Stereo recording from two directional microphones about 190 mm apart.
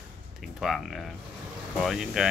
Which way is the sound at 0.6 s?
Centre (ahead or behind).